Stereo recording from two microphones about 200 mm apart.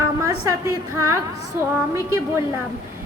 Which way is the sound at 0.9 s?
15° right (ahead or behind).